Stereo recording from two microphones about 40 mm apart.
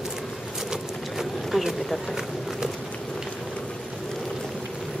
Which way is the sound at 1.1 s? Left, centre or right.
Centre.